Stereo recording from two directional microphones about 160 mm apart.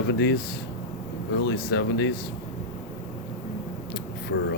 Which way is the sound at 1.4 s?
90° left.